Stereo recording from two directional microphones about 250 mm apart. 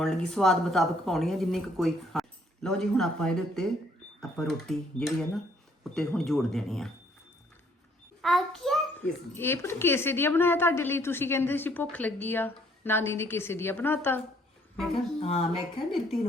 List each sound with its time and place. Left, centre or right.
0.0 s speech: centre
8.2 s a child's voice: centre
15.2 s speech: left
15.9 s speech: centre